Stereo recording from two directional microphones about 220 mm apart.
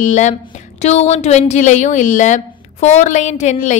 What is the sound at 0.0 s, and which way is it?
A woman's voice, 35° left (ahead or behind).